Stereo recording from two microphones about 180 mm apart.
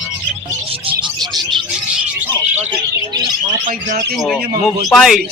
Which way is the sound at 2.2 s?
10° right (ahead or behind).